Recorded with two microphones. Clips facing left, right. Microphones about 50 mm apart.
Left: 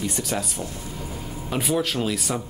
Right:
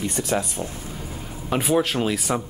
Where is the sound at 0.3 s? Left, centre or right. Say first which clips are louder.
Right 3 dB; right.